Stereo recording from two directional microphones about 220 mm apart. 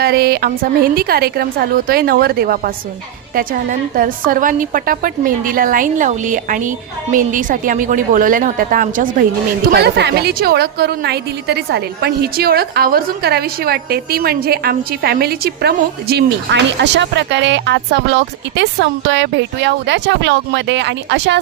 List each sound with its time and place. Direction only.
0.0 s a woman's voice: 45° right (ahead or behind)